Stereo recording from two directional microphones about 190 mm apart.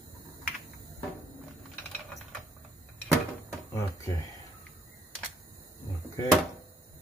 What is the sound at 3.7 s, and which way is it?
Speech, 15° left (ahead or behind).